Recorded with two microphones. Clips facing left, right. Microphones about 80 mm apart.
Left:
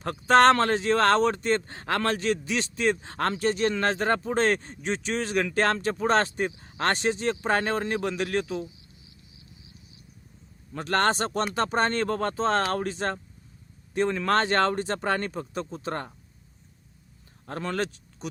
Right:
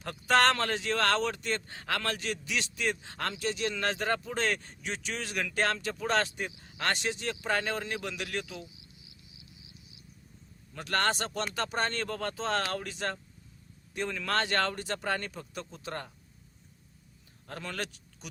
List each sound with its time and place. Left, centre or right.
0.0 s speech: left
10.8 s speech: left
17.4 s speech: left